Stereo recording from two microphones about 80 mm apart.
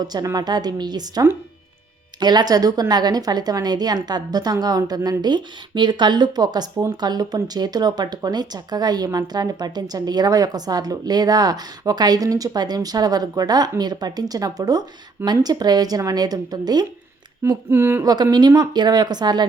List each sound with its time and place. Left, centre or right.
0.0 s a woman's voice: right
2.2 s a woman's voice: right
17.7 s speech: right
18.0 s a woman's voice: right